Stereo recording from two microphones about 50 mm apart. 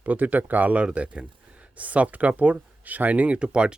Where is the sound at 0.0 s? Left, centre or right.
Right.